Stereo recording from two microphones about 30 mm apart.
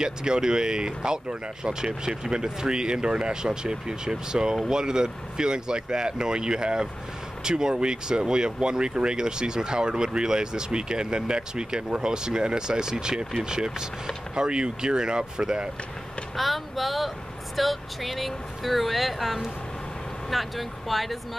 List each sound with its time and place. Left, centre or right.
0.0 s speech: right
16.3 s speech: centre